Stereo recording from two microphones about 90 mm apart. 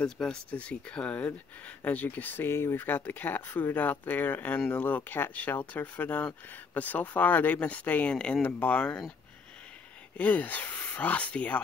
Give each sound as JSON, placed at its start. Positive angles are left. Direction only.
{"t": 0.0, "sound": "speech", "side_deg": 10}
{"t": 10.1, "sound": "speech", "side_deg": 20}